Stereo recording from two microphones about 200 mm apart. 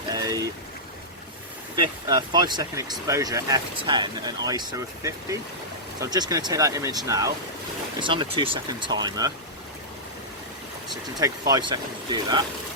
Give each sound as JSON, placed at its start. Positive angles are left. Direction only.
{"t": 0.1, "sound": "boat", "side_deg": -20}
{"t": 1.7, "sound": "speech", "side_deg": -20}
{"t": 6.0, "sound": "speech", "side_deg": -20}
{"t": 11.2, "sound": "speech", "side_deg": -20}